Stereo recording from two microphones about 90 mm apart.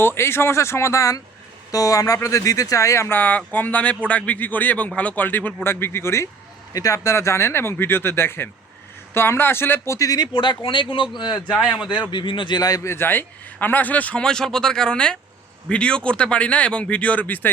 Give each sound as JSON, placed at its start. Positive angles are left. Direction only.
{"t": 0.0, "sound": "speech", "side_deg": 25}
{"t": 10.3, "sound": "speech", "side_deg": 65}
{"t": 12.1, "sound": "speech", "side_deg": 65}
{"t": 12.8, "sound": "speech", "side_deg": 30}